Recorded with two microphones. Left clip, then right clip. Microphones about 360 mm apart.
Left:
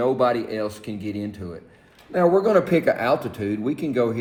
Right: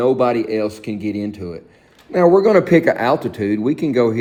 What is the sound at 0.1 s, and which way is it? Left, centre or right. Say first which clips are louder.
Speech: right 5 dB; right.